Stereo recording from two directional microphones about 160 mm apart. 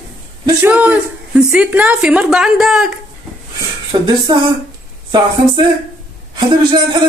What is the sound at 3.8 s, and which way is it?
Speech, 30° right (ahead or behind).